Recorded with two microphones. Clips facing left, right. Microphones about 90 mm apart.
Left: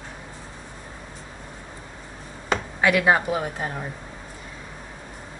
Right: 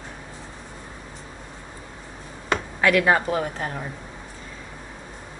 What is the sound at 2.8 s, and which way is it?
Speech, 15° left (ahead or behind).